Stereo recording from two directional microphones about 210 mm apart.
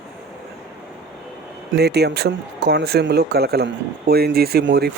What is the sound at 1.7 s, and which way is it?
Speech, 50° right (ahead or behind).